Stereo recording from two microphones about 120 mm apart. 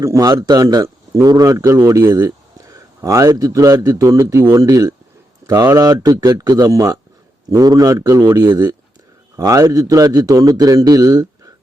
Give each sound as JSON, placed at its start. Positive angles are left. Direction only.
{"t": 0.0, "sound": "a man's voice", "side_deg": -30}